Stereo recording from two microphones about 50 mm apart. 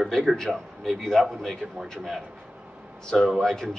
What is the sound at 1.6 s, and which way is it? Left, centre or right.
Speech, right.